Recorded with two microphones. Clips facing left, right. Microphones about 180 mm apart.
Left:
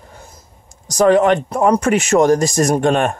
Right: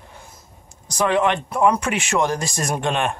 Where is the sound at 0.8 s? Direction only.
40° left (ahead or behind).